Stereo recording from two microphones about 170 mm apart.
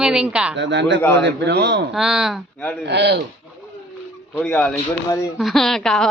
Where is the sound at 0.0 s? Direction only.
5° right (ahead or behind).